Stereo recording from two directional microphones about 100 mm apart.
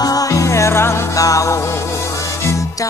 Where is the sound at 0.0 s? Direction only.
35° left (ahead or behind).